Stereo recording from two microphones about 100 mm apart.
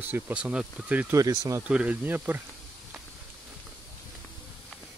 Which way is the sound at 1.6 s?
10° right (ahead or behind).